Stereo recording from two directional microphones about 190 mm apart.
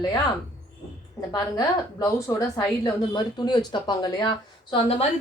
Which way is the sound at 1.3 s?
20° left (ahead or behind).